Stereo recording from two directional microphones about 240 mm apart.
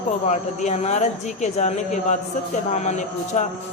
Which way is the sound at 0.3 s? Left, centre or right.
Left.